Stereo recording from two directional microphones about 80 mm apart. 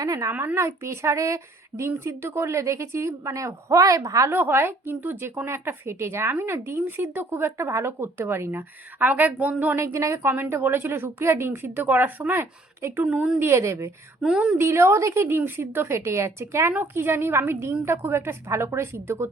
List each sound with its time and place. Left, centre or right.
0.0 s speech: right
0.3 s speech: right
4.3 s a woman's voice: right
9.0 s a woman's voice: right
9.8 s a woman's voice: right
13.1 s speech: centre
13.4 s speech: right
14.2 s speech: centre
14.6 s a woman's voice: right